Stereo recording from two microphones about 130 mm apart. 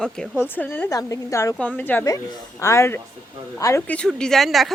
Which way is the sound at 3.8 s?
10° left (ahead or behind).